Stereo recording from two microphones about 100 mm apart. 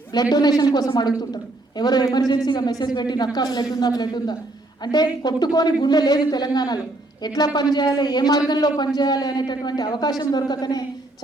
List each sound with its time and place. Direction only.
0.1 s a man's voice: 40° left (ahead or behind)